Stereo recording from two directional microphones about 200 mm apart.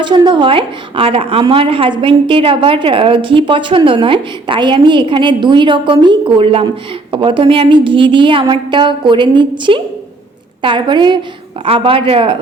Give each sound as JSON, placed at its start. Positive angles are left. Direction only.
{"t": 0.0, "sound": "a woman's voice", "side_deg": -25}